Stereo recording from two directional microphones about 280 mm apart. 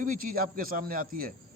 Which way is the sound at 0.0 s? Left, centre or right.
Right.